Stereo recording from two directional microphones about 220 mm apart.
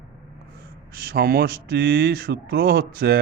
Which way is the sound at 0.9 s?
40° right (ahead or behind).